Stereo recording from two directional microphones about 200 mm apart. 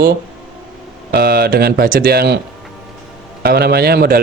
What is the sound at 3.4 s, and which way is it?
Speech, 50° right (ahead or behind).